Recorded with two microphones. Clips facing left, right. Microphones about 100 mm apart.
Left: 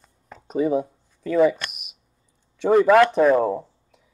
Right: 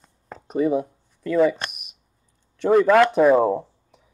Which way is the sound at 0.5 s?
Centre (ahead or behind).